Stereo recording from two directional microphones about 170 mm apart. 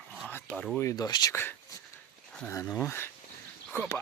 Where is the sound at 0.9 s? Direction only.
25° left (ahead or behind).